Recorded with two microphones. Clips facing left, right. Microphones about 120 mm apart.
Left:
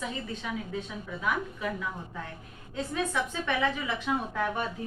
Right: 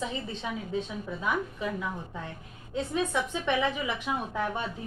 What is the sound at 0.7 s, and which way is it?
A woman's voice, 20° right (ahead or behind).